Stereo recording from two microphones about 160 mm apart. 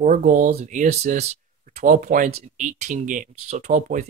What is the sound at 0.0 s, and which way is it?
Speech, 50° right (ahead or behind).